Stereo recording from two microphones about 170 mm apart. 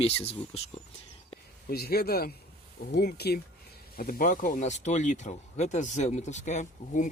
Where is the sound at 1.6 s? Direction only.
65° left (ahead or behind).